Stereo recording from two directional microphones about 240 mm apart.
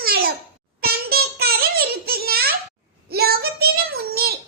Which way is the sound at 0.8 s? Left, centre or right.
Right.